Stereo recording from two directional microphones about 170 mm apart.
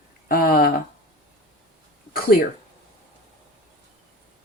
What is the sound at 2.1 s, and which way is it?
Speech, 60° left (ahead or behind).